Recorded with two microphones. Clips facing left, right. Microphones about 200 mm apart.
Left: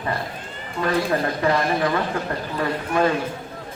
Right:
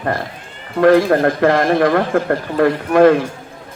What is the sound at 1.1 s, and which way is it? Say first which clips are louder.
Speech: right 7 dB; 75° right (ahead or behind).